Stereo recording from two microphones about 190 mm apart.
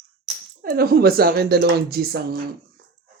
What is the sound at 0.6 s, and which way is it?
Speech, 55° right (ahead or behind).